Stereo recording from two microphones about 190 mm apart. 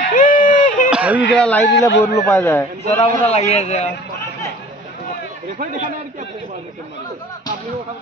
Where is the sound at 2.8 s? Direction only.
35° left (ahead or behind).